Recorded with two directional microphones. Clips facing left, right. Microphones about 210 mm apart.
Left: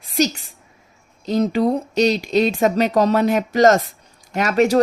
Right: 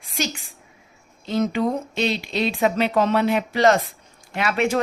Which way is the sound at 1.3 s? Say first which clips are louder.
Left 4 dB; 35° left (ahead or behind).